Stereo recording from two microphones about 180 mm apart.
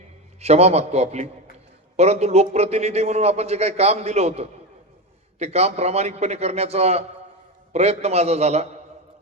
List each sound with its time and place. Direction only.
0.3 s a man's voice: 35° right (ahead or behind)